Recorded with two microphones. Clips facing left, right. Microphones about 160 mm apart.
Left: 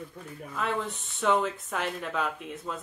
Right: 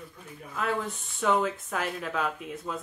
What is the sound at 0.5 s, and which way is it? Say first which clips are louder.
Speech: right 1 dB; 5° right (ahead or behind).